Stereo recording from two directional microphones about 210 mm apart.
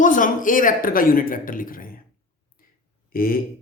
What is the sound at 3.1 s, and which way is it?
Speech, 45° left (ahead or behind).